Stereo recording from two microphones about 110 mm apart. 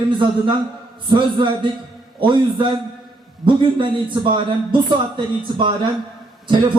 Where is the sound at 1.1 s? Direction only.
50° right (ahead or behind).